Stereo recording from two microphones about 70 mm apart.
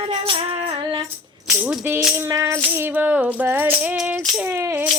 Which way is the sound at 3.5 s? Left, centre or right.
Right.